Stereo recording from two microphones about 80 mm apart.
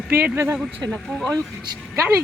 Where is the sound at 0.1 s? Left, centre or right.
Right.